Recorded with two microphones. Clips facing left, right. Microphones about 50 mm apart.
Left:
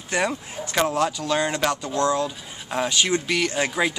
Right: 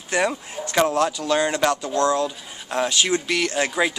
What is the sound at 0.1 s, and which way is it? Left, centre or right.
Speech, centre.